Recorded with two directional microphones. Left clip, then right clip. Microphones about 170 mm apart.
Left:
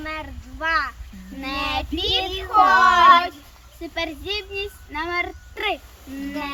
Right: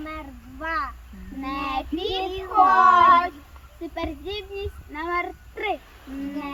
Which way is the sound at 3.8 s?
Centre (ahead or behind).